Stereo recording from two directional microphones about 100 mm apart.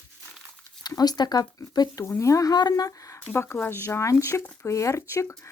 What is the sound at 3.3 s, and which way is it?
Speech, 25° left (ahead or behind).